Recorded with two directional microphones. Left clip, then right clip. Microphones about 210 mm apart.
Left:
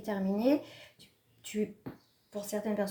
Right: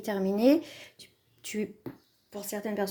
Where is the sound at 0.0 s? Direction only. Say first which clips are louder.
Right 6 dB; 35° right (ahead or behind).